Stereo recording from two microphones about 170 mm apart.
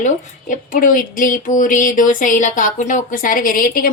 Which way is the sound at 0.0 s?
50° left (ahead or behind).